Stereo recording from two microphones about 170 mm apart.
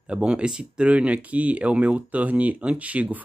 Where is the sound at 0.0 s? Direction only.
5° right (ahead or behind).